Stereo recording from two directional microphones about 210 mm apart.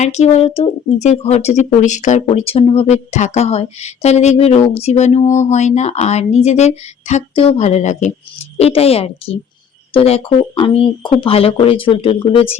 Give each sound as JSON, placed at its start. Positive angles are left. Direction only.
{"t": 0.0, "sound": "speech", "side_deg": 30}